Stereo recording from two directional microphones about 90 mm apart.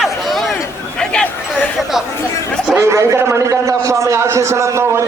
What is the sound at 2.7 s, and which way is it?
A man's voice, 30° right (ahead or behind).